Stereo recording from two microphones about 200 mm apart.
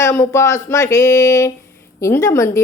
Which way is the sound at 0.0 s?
15° left (ahead or behind).